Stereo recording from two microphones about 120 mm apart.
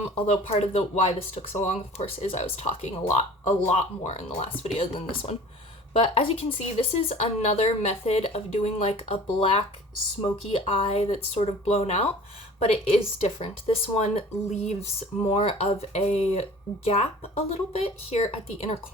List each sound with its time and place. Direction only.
0.5 s speech: 55° left (ahead or behind)